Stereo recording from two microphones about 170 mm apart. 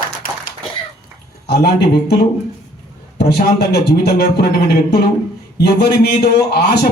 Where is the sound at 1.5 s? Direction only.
75° left (ahead or behind).